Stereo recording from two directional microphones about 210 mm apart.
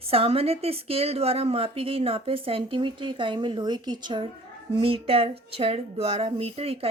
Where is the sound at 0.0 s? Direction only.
25° right (ahead or behind).